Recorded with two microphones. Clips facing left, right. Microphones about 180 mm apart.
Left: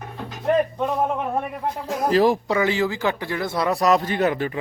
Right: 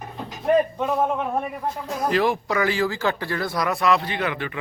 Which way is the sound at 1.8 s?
35° left (ahead or behind).